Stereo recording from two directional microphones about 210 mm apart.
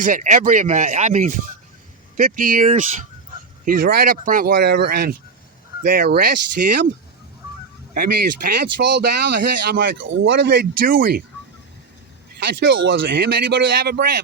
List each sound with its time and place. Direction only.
0.0 s speech: 35° right (ahead or behind)
7.9 s speech: 45° right (ahead or behind)
12.5 s speech: 50° right (ahead or behind)